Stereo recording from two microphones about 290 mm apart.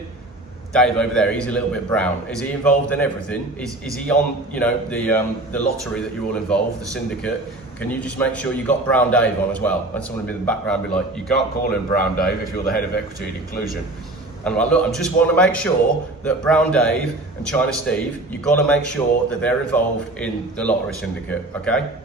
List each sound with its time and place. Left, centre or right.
0.7 s a man's voice: centre
11.9 s a man's voice: left
14.4 s a man's voice: centre